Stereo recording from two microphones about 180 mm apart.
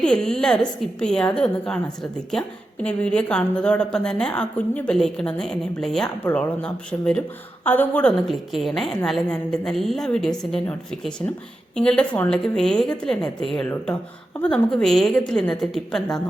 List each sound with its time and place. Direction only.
0.0 s a woman's voice: 5° left (ahead or behind)
2.8 s a woman's voice: 5° left (ahead or behind)